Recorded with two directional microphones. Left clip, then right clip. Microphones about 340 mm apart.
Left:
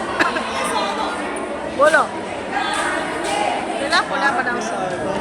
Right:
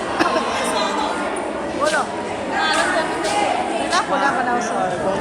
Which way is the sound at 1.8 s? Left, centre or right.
Centre.